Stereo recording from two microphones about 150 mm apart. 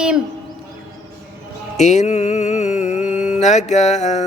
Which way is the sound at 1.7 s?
50° left (ahead or behind).